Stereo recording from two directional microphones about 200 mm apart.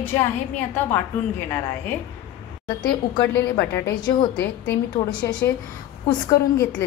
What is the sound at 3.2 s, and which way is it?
A woman's voice, 10° left (ahead or behind).